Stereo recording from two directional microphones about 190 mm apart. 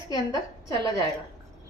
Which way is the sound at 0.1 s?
20° left (ahead or behind).